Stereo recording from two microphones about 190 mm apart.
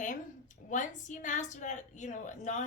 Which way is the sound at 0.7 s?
40° left (ahead or behind).